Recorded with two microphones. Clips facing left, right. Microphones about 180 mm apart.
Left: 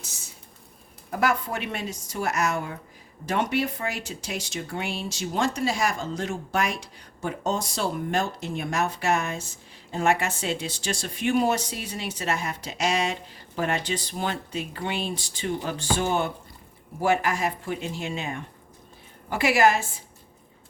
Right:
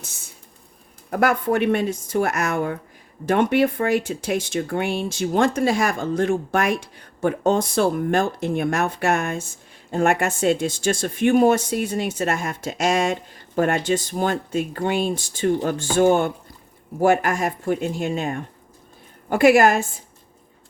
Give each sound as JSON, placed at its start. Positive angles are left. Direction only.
{"t": 1.1, "sound": "speech", "side_deg": -55}